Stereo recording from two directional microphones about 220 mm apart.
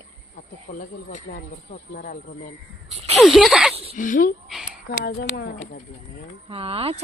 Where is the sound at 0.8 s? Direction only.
35° left (ahead or behind).